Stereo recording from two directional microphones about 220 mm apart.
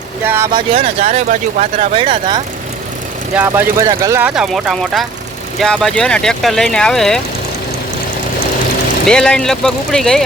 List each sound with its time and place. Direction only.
0.3 s speech: 10° right (ahead or behind)
0.7 s speech: 25° right (ahead or behind)
3.3 s speech: 10° right (ahead or behind)
9.0 s speech: 5° left (ahead or behind)